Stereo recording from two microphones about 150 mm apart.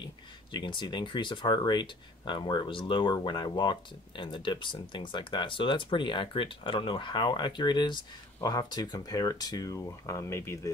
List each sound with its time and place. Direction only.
0.0 s speech: 30° left (ahead or behind)